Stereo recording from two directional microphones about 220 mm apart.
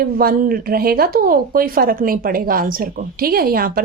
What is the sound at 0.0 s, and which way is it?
A woman's voice, 40° right (ahead or behind).